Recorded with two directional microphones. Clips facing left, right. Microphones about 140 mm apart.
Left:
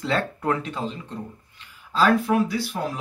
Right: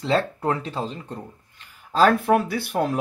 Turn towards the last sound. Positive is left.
turn(degrees=-55)  # may be behind; listen again after turning